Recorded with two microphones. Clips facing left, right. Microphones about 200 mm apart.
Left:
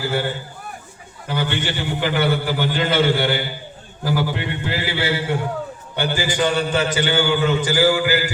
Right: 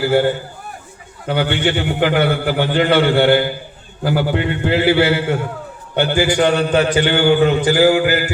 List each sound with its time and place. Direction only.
0.0 s a man's voice: 60° right (ahead or behind)